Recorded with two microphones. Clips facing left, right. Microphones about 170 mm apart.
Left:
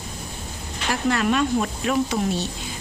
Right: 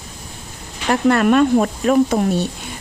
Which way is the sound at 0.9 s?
55° right (ahead or behind).